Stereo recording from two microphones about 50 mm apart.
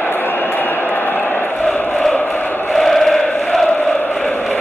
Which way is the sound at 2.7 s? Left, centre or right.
Centre.